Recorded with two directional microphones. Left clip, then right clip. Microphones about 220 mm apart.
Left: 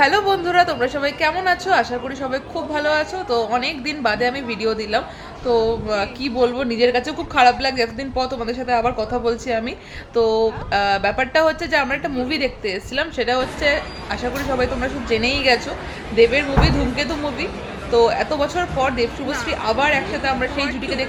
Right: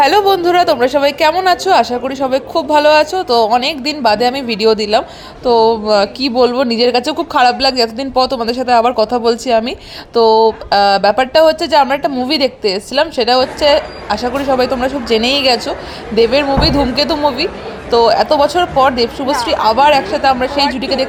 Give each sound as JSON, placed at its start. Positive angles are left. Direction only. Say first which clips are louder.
{"t": 0.0, "sound": "a woman's voice", "louder": "right 7 dB", "side_deg": -35}